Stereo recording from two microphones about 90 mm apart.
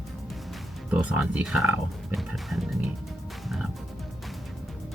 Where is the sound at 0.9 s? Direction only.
10° right (ahead or behind).